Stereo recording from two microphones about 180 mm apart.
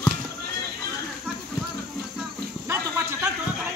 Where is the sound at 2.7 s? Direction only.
15° right (ahead or behind).